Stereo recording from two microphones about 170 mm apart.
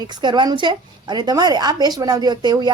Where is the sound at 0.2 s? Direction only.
25° right (ahead or behind).